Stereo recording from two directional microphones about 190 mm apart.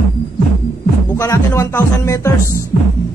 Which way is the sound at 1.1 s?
15° left (ahead or behind).